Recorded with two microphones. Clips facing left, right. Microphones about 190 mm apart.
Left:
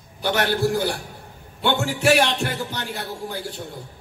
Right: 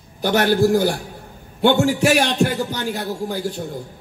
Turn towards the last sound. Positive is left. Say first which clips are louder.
# right 6 dB
turn(degrees=-45)  # may be behind; listen again after turning